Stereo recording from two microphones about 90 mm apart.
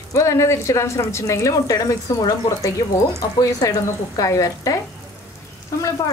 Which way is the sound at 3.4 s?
40° left (ahead or behind).